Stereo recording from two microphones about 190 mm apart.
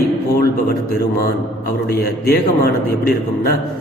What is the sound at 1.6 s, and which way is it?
Mantra, 55° left (ahead or behind).